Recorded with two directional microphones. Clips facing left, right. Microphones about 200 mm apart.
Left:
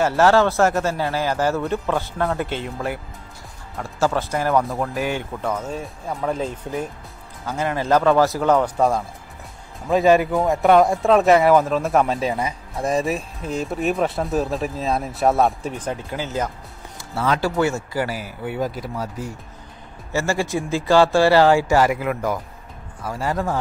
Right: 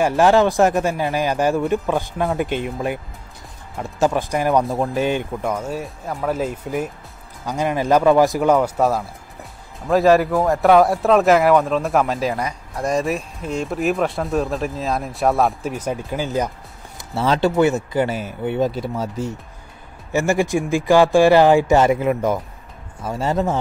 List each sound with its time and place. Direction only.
0.0 s speech: 15° right (ahead or behind)
4.6 s speech: 25° right (ahead or behind)
5.4 s speech: 10° right (ahead or behind)
17.1 s speech: 25° right (ahead or behind)